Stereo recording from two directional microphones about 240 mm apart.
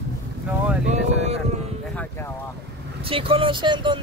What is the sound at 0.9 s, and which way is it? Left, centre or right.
Speech, right.